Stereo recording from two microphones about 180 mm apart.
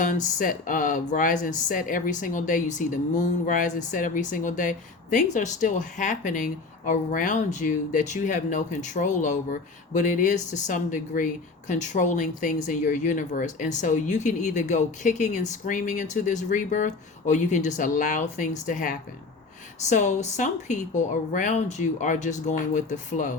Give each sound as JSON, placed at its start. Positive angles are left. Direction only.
{"t": 0.0, "sound": "speech", "side_deg": 45}